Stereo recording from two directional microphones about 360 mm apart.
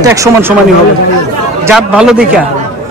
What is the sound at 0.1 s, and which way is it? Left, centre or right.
Speech, centre.